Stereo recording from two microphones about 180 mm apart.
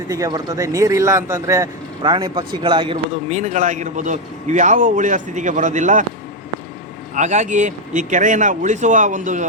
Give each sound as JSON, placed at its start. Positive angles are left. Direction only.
{"t": 0.1, "sound": "speech", "side_deg": -20}
{"t": 7.2, "sound": "a man's voice", "side_deg": -40}